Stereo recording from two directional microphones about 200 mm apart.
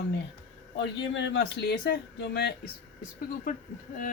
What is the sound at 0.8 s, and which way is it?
Speech, 60° left (ahead or behind).